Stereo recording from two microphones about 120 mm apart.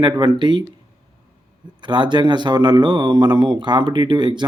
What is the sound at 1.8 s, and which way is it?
Speech, 40° right (ahead or behind).